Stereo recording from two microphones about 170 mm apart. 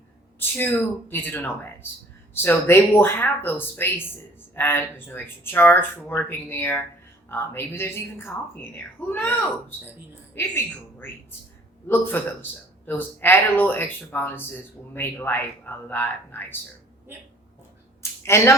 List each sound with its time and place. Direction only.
0.3 s speech: 10° left (ahead or behind)
11.9 s speech: 10° left (ahead or behind)
18.3 s speech: 15° left (ahead or behind)